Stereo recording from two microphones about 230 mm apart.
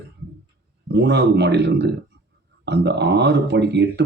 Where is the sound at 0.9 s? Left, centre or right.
Right.